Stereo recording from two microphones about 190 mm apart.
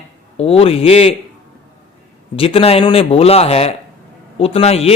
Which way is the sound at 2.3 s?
30° left (ahead or behind).